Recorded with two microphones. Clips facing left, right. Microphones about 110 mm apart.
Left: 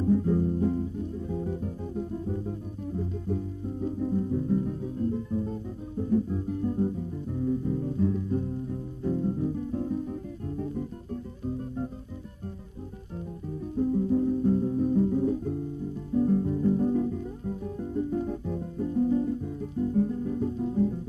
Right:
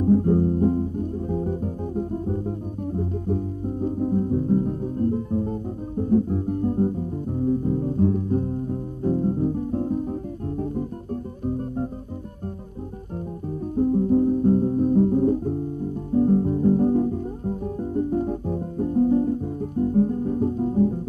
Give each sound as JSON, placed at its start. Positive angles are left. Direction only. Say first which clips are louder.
{"t": 0.0, "sound": "music", "louder": "right 6 dB", "side_deg": -45}
{"t": 11.4, "sound": "guitar", "louder": "right 6 dB", "side_deg": -45}
{"t": 13.7, "sound": "music", "louder": "right 6 dB", "side_deg": -45}